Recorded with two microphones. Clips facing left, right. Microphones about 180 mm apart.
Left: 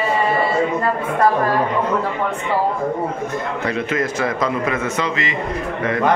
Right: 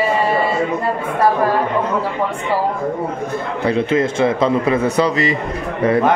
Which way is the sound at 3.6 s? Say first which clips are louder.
Right 7 dB; 30° right (ahead or behind).